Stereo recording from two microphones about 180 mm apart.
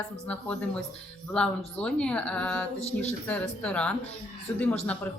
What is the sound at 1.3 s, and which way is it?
Speech, 5° left (ahead or behind).